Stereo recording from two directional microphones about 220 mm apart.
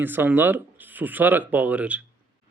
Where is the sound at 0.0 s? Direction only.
10° right (ahead or behind).